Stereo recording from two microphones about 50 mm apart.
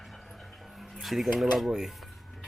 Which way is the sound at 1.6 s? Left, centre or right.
Centre.